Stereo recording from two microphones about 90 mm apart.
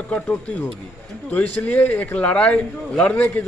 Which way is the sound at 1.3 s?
20° left (ahead or behind).